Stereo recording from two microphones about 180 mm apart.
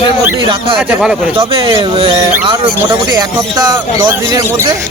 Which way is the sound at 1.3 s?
30° right (ahead or behind).